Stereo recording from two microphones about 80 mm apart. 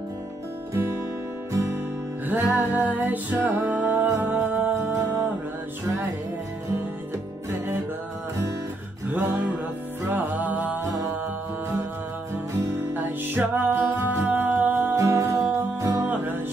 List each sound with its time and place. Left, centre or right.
1.5 s music: right
2.2 s music: right
4.9 s music: right
9.1 s music: right
12.9 s music: right
15.0 s music: right